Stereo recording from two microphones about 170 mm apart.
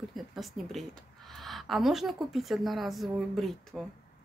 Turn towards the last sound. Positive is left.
turn(degrees=0)  # may be behind; listen again after turning